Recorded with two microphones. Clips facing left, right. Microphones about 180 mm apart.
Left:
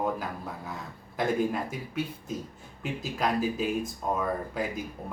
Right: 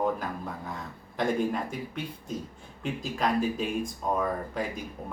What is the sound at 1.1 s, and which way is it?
Speech, 5° left (ahead or behind).